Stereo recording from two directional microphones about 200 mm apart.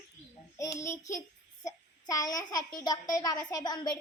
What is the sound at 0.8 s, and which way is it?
A child's voice, 15° left (ahead or behind).